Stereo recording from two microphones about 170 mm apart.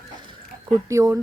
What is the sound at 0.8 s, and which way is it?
Speech, 20° right (ahead or behind).